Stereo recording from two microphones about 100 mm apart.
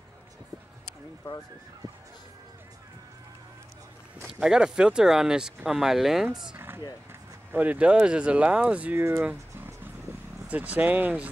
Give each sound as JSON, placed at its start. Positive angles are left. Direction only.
{"t": 4.2, "sound": "speech", "side_deg": -5}
{"t": 6.5, "sound": "a sound", "side_deg": -20}
{"t": 7.5, "sound": "speech", "side_deg": -15}
{"t": 10.5, "sound": "speech", "side_deg": -15}